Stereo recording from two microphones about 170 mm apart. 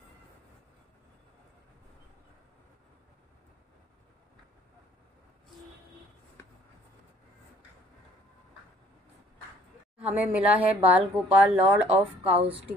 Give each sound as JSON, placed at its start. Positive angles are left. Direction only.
{"t": 10.0, "sound": "a woman's voice", "side_deg": -10}
{"t": 12.4, "sound": "a woman's voice", "side_deg": -35}